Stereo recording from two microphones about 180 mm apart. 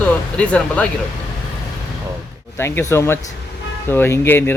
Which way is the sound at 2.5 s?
15° left (ahead or behind).